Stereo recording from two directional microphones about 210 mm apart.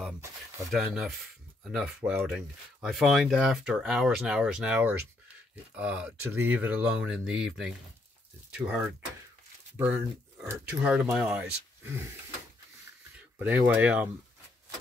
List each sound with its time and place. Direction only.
0.7 s speech: centre (ahead or behind)
13.4 s speech: 5° right (ahead or behind)